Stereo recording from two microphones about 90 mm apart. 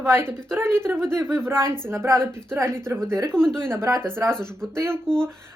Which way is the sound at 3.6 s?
30° right (ahead or behind).